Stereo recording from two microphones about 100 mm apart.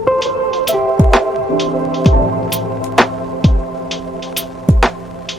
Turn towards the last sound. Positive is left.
turn(degrees=0)  # may be behind; listen again after turning